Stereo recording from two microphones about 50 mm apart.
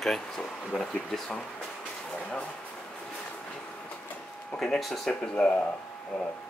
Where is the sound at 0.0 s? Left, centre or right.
Centre.